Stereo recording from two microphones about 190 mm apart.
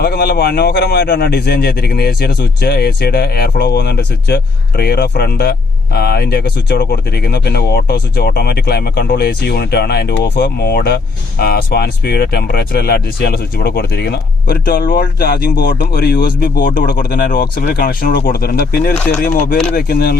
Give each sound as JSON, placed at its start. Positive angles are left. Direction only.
{"t": 0.0, "sound": "speech", "side_deg": 55}